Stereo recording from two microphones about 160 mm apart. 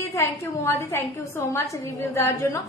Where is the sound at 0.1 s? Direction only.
15° left (ahead or behind).